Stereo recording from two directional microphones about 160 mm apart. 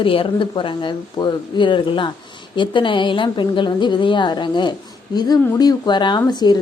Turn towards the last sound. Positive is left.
turn(degrees=25)  # may be behind; listen again after turning